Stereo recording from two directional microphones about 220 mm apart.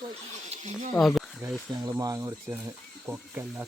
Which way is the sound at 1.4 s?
15° right (ahead or behind).